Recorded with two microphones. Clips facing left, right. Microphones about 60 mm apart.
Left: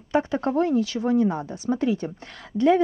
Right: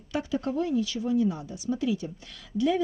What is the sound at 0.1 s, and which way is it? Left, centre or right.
Speech, left.